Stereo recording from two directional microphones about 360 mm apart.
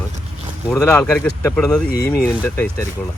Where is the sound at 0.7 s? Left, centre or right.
Centre.